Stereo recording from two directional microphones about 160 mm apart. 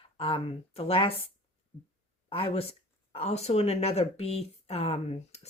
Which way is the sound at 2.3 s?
35° left (ahead or behind).